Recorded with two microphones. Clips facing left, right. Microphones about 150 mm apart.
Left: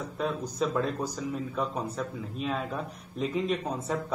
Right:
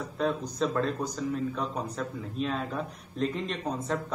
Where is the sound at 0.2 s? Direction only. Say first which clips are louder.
Right 1 dB; 5° left (ahead or behind).